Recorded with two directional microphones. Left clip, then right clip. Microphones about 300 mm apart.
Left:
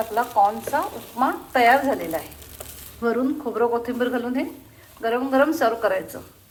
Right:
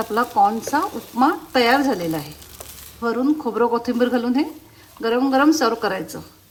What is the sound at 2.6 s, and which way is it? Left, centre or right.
Speech, centre.